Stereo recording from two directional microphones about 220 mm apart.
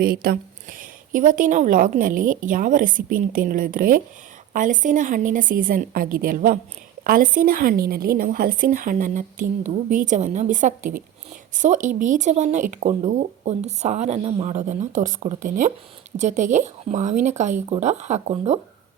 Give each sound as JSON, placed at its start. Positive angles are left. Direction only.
{"t": 0.0, "sound": "speech", "side_deg": -45}